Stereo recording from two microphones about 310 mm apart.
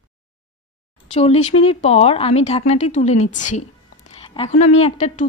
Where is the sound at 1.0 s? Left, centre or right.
Left.